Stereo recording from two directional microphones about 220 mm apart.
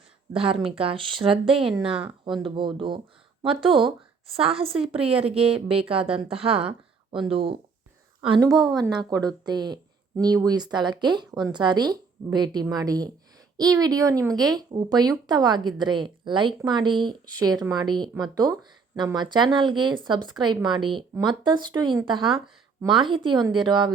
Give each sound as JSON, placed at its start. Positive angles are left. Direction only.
{"t": 0.3, "sound": "a woman's voice", "side_deg": -25}